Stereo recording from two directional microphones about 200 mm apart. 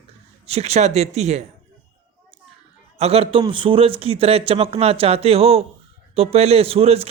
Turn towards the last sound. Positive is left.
turn(degrees=-30)  # may be behind; listen again after turning